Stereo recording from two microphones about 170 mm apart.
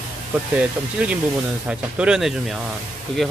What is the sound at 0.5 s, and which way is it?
Speech, 5° right (ahead or behind).